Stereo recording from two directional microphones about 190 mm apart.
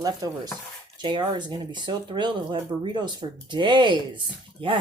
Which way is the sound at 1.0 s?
25° right (ahead or behind).